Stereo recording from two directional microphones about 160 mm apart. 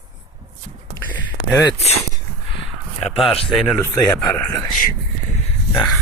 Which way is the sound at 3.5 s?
Centre (ahead or behind).